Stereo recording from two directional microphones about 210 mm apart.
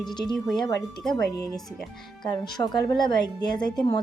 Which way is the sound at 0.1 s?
20° left (ahead or behind).